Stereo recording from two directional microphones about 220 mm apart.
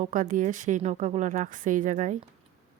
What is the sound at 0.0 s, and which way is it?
Speech, 35° right (ahead or behind).